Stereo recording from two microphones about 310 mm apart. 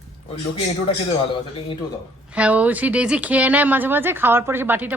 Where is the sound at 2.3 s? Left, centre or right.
Centre.